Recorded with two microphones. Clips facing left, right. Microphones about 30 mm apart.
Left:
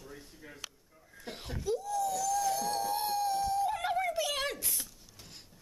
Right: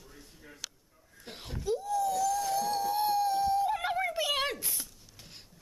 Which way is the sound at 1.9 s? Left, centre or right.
Centre.